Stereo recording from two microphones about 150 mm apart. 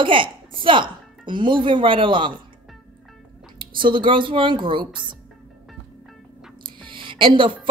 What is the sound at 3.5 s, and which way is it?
Speech, 35° right (ahead or behind).